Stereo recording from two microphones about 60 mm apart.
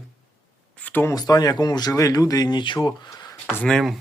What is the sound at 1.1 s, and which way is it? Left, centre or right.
Speech, left.